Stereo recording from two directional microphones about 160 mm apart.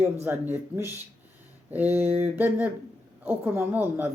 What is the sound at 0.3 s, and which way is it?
Speech, 10° right (ahead or behind).